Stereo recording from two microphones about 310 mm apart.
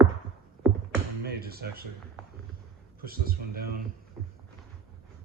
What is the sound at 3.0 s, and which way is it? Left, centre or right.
Speech, right.